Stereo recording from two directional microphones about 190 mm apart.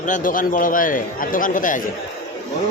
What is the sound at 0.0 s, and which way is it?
A man's voice, 45° left (ahead or behind).